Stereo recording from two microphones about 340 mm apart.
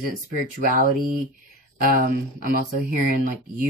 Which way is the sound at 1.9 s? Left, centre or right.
Right.